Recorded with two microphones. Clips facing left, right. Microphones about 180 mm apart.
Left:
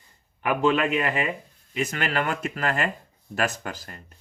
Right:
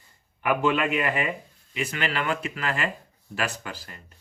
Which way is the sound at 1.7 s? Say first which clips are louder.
Left 2 dB; 45° left (ahead or behind).